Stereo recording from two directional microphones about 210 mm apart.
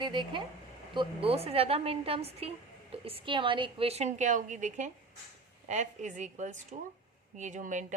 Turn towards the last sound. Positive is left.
turn(degrees=-35)  # may be behind; listen again after turning